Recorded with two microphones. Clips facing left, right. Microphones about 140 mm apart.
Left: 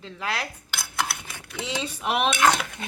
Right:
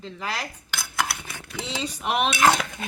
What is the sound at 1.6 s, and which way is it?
Dishes, 5° left (ahead or behind).